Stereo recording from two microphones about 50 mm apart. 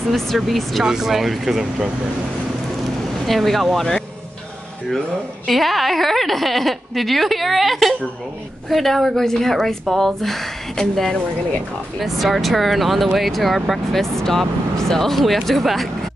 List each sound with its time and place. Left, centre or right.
0.4 s a woman's voice: centre
3.3 s a woman's voice: centre
5.5 s a woman's voice: centre